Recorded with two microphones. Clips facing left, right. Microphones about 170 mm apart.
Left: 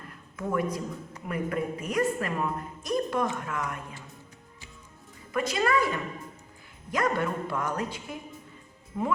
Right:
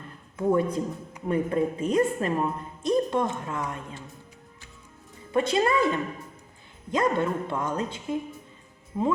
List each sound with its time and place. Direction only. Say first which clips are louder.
0.3 s a woman's voice: right 6 dB; 25° right (ahead or behind)
5.3 s a woman's voice: right 3 dB; 30° right (ahead or behind)
6.9 s a woman's voice: right 3 dB; 25° right (ahead or behind)